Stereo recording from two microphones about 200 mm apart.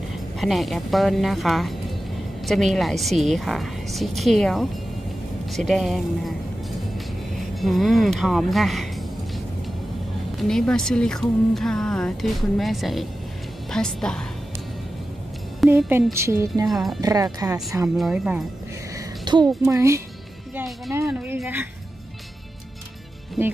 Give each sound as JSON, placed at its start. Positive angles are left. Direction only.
{"t": 0.4, "sound": "speech", "side_deg": 0}
{"t": 7.3, "sound": "speech", "side_deg": 0}
{"t": 10.4, "sound": "speech", "side_deg": 5}
{"t": 15.6, "sound": "speech", "side_deg": -5}
{"t": 16.6, "sound": "speech", "side_deg": 0}
{"t": 17.0, "sound": "speech", "side_deg": -20}
{"t": 17.8, "sound": "speech", "side_deg": -5}
{"t": 18.9, "sound": "a sound", "side_deg": -20}
{"t": 19.7, "sound": "speech", "side_deg": -15}
{"t": 20.5, "sound": "speech", "side_deg": 0}